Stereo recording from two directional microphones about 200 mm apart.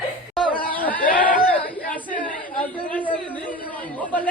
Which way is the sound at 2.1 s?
40° left (ahead or behind).